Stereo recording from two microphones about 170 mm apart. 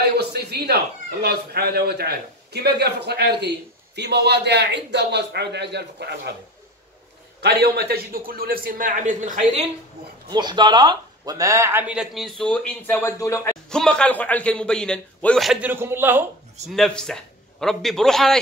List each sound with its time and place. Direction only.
0.0 s a man's voice: 75° right (ahead or behind)
7.4 s a man's voice: 70° right (ahead or behind); by 9.7 s 40° right (ahead or behind)
10.3 s speech: 25° right (ahead or behind); by 13.6 s 20° left (ahead or behind)
13.7 s speech: 5° left (ahead or behind); by 16.3 s 10° right (ahead or behind)
16.6 s speech: centre (ahead or behind)